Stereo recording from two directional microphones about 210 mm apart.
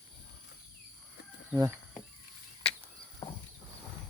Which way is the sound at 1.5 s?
15° right (ahead or behind).